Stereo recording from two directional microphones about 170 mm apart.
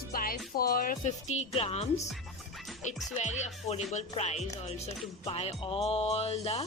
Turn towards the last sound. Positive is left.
turn(degrees=35)  # may be behind; listen again after turning